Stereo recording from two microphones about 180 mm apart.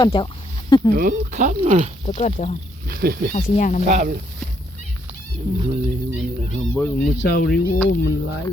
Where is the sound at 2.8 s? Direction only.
55° right (ahead or behind).